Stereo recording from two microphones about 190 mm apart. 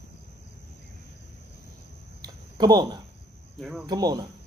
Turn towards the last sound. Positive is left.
turn(degrees=-20)  # may be behind; listen again after turning